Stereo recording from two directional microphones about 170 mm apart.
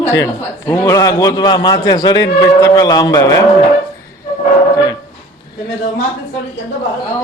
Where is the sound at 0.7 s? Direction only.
20° left (ahead or behind).